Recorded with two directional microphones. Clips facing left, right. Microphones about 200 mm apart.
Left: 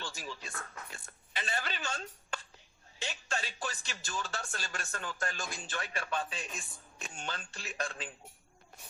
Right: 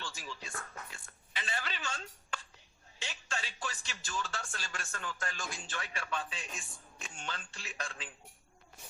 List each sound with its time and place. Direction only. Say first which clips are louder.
0.0 s speech: left 2 dB; 40° left (ahead or behind)